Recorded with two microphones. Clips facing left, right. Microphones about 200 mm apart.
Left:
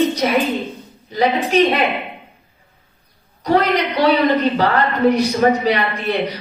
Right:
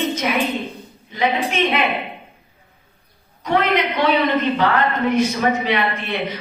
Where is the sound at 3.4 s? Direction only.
35° left (ahead or behind).